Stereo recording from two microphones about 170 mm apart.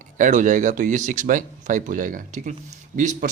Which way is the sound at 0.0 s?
50° right (ahead or behind).